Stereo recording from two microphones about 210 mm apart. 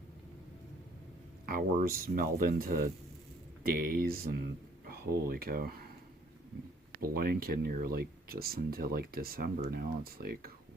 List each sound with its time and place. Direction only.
1.5 s speech: 45° right (ahead or behind)
7.0 s speech: 45° right (ahead or behind)